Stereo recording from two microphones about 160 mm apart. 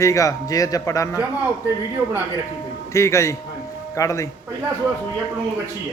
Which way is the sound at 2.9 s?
20° left (ahead or behind).